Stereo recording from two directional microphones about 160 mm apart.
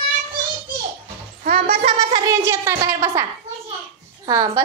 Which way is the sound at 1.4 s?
60° right (ahead or behind).